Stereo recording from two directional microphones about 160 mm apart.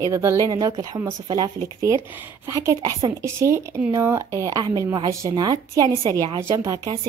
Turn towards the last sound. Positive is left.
turn(degrees=-20)  # may be behind; listen again after turning